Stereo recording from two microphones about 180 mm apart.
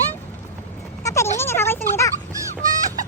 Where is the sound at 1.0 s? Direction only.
15° left (ahead or behind).